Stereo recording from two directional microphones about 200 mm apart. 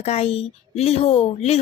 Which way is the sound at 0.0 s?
30° left (ahead or behind).